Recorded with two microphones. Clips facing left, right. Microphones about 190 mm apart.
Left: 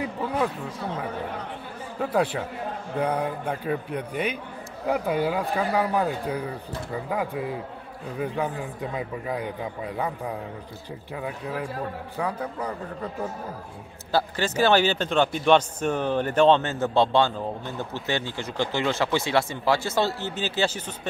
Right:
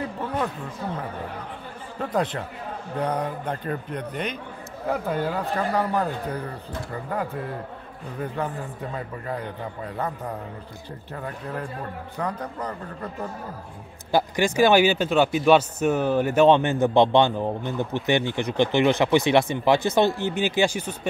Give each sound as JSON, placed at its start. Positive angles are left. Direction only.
{"t": 0.0, "sound": "speech", "side_deg": 10}
{"t": 2.0, "sound": "a man's voice", "side_deg": 5}
{"t": 14.1, "sound": "a man's voice", "side_deg": -15}